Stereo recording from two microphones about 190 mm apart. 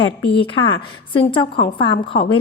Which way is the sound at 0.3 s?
25° left (ahead or behind).